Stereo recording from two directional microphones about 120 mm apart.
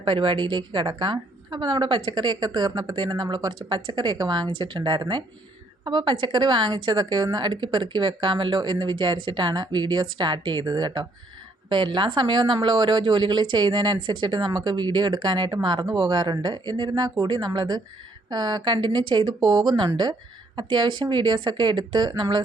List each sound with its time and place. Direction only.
0.0 s a woman's voice: 45° right (ahead or behind)